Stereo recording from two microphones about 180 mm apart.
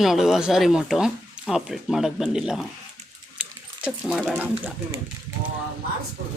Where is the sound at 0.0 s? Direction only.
Centre (ahead or behind).